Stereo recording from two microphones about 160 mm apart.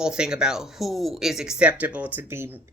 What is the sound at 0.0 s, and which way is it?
Speech, 5° right (ahead or behind).